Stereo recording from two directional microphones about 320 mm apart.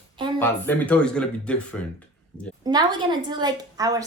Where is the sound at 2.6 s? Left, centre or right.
Centre.